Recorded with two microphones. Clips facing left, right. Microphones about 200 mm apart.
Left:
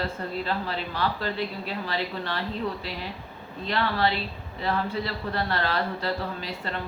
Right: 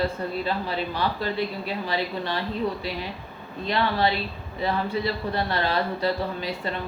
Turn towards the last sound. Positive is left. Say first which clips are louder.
# right 4 dB
turn(degrees=-15)  # may be behind; listen again after turning